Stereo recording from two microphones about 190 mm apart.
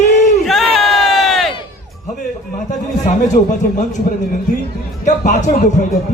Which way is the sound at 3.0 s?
40° left (ahead or behind).